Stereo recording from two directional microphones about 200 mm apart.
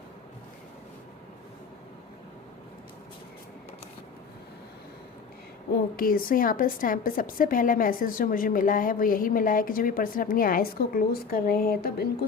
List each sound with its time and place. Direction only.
6.0 s a woman's voice: 45° left (ahead or behind)